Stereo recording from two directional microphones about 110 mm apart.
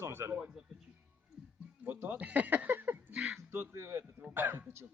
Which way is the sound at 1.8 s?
15° right (ahead or behind).